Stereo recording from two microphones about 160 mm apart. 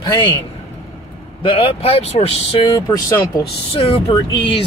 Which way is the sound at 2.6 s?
20° left (ahead or behind).